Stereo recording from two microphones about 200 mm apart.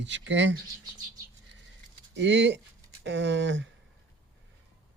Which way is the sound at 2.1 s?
60° right (ahead or behind).